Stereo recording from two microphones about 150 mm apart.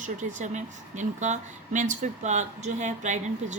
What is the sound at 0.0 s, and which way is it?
Speech, 55° right (ahead or behind).